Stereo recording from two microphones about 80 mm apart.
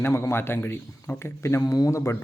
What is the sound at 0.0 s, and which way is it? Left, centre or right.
Speech, left.